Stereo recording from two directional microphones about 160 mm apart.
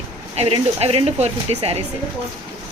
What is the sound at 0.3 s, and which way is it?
Speech, 40° right (ahead or behind).